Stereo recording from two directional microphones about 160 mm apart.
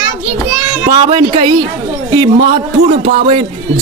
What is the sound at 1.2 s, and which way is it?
A man's voice, 25° right (ahead or behind).